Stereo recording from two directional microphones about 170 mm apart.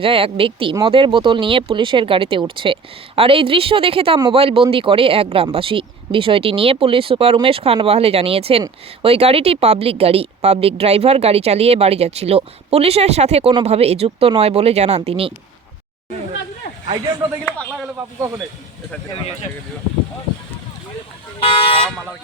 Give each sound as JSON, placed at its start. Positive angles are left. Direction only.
{"t": 0.0, "sound": "speech", "side_deg": -35}
{"t": 21.4, "sound": "speech", "side_deg": 35}